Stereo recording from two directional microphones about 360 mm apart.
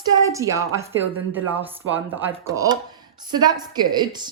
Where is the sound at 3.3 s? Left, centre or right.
Centre.